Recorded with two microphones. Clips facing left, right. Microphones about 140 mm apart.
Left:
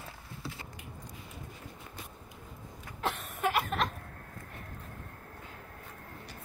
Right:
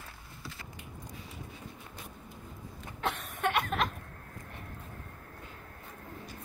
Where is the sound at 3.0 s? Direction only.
Centre (ahead or behind).